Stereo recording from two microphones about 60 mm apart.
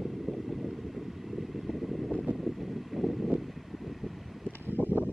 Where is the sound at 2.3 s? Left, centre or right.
Centre.